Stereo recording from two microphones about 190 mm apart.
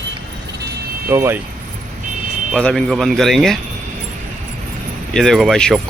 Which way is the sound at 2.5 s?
5° left (ahead or behind).